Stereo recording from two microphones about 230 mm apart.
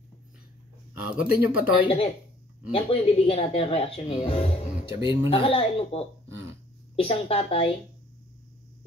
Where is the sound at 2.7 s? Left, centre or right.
Left.